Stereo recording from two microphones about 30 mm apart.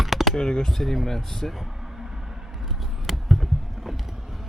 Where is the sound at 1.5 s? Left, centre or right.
Centre.